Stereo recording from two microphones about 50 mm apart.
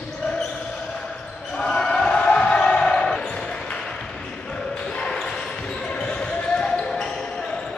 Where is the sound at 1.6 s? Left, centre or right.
Centre.